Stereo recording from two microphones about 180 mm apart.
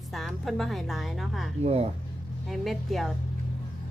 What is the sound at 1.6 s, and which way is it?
Speech, 35° right (ahead or behind).